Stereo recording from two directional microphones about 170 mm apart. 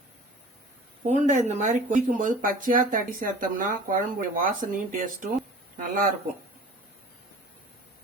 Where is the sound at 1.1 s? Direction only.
45° right (ahead or behind).